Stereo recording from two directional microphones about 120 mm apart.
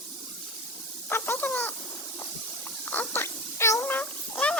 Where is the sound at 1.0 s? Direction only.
20° left (ahead or behind).